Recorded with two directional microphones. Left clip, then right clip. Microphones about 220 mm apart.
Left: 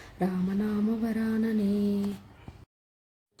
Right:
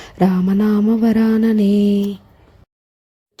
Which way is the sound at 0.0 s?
40° right (ahead or behind).